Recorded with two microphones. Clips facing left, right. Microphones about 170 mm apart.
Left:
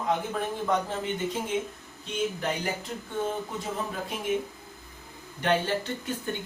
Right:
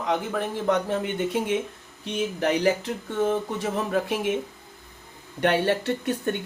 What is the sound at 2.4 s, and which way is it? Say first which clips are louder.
Speech: right 8 dB; 75° right (ahead or behind).